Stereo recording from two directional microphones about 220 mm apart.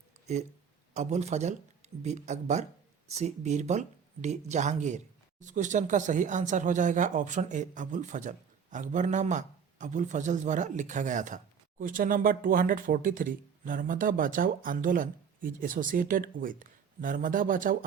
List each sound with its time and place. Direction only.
0.3 s speech: 30° right (ahead or behind)